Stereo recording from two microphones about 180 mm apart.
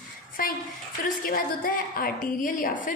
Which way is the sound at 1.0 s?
50° left (ahead or behind).